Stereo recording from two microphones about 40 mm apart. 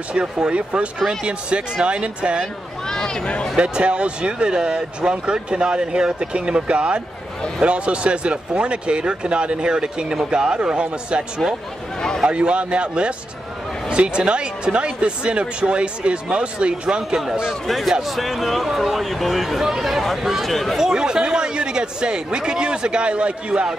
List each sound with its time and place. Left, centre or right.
0.1 s speech: right
2.9 s a sound: centre
3.5 s speech: right
17.6 s speech: centre
20.7 s speech: centre